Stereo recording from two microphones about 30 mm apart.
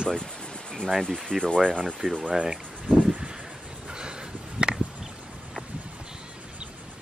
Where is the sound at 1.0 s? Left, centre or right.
Centre.